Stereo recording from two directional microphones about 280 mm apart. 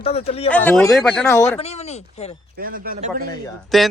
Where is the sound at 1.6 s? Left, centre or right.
Left.